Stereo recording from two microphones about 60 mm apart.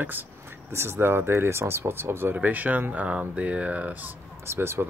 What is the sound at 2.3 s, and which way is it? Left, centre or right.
Speech, right.